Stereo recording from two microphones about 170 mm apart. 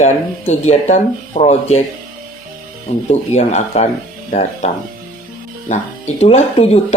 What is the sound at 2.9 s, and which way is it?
Speech, 40° left (ahead or behind).